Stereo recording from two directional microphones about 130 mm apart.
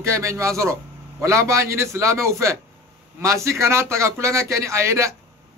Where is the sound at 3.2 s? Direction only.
20° right (ahead or behind).